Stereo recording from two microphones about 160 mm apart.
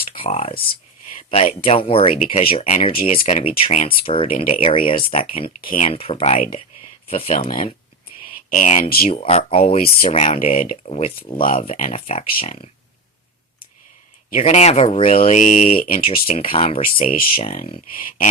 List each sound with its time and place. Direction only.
0.0 s a sound: 35° left (ahead or behind)
1.3 s speech: 35° left (ahead or behind)
5.6 s speech: 55° left (ahead or behind)
5.9 s speech: 35° left (ahead or behind)
7.3 s speech: 55° left (ahead or behind); by 12.7 s 40° left (ahead or behind)
14.3 s speech: 45° left (ahead or behind)
16.0 s speech: 40° left (ahead or behind)
17.0 s a sound: 60° left (ahead or behind)
17.3 s speech: 35° left (ahead or behind)
17.9 s a sound: 60° left (ahead or behind)